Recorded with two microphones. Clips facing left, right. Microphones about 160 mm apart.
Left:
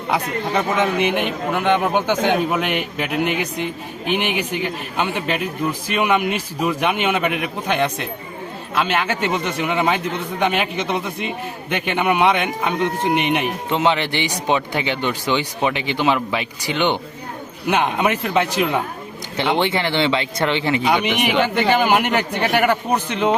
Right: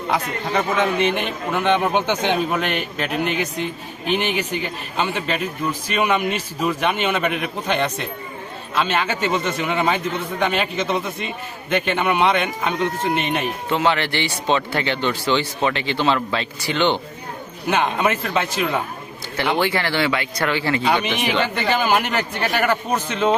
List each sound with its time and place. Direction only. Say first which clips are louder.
0.1 s speech: left 2 dB; 15° left (ahead or behind)